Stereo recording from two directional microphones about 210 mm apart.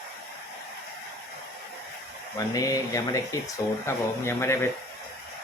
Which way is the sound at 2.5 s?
15° left (ahead or behind).